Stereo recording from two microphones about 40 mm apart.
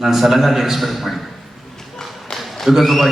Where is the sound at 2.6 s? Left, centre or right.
Centre.